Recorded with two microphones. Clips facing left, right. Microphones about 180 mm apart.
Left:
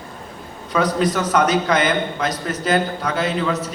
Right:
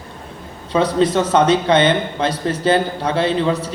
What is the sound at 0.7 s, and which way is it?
Speech, 25° right (ahead or behind).